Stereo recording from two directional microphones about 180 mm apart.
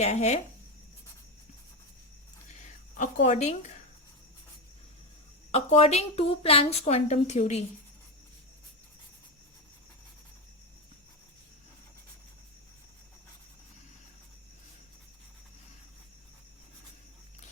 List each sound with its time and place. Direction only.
0.0 s a woman's voice: 40° left (ahead or behind)
2.9 s a woman's voice: 45° left (ahead or behind)
5.5 s a woman's voice: 35° left (ahead or behind)